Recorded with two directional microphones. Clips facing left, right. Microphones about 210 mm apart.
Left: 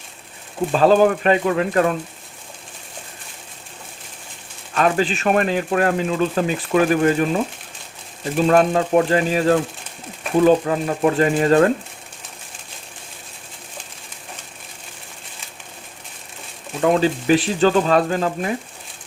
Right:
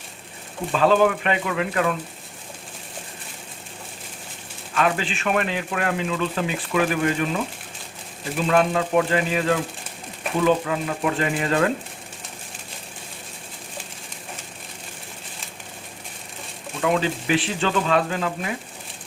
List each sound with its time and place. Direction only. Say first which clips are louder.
0.7 s speech: left 4 dB; 40° left (ahead or behind)
4.7 s speech: left 5 dB; 40° left (ahead or behind)
8.4 s speech: left 4 dB; 40° left (ahead or behind)
16.8 s speech: left 5 dB; 40° left (ahead or behind)